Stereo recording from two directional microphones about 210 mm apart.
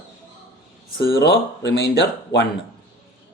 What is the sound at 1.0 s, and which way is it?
Speech, 50° left (ahead or behind).